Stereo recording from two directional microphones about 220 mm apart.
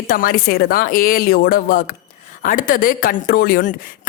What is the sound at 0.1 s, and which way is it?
Speech, 40° left (ahead or behind).